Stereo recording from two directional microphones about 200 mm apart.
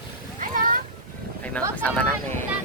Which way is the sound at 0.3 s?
45° right (ahead or behind).